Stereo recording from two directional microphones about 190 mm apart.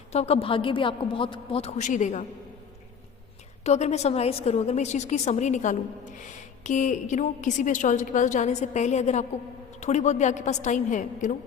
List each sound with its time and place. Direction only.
0.1 s a woman's voice: 35° left (ahead or behind)
3.6 s a woman's voice: 35° left (ahead or behind)